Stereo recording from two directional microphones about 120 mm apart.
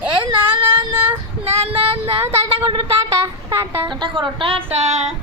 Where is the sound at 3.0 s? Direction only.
20° right (ahead or behind).